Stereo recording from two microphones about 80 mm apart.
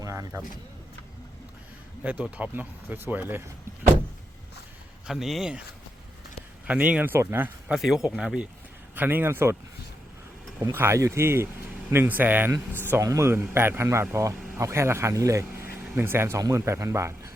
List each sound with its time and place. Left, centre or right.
0.0 s a sound: right
2.3 s speech: right
5.0 s speech: centre
6.7 s speech: centre
7.7 s speech: centre
9.0 s speech: right
10.6 s speech: right
13.0 s speech: right